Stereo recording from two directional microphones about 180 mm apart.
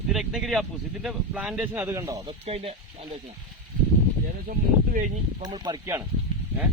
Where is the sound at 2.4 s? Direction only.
35° right (ahead or behind).